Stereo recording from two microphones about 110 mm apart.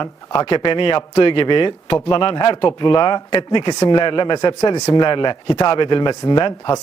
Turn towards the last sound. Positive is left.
turn(degrees=40)  # may be behind; listen again after turning